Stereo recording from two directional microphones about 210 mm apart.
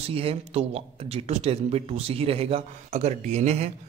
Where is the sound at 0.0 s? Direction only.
25° right (ahead or behind).